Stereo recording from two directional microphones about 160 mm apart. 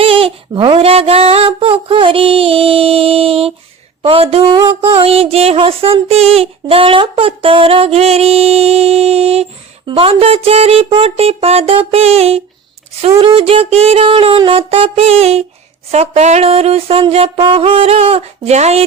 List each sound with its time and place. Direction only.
0.0 s speech: 35° right (ahead or behind)